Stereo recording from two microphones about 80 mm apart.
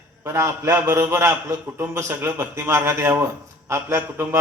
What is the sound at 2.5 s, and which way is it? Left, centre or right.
A man's voice, right.